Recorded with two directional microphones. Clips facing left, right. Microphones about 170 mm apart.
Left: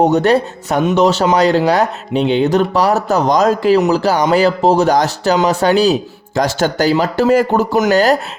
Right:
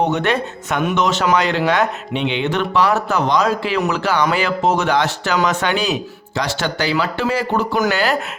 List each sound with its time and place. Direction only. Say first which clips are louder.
0.0 s speech: left 6 dB; 40° left (ahead or behind)